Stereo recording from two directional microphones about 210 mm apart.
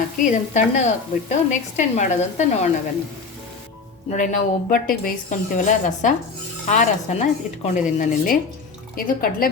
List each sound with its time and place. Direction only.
0.3 s speech: 35° left (ahead or behind)
4.1 s speech: 35° left (ahead or behind)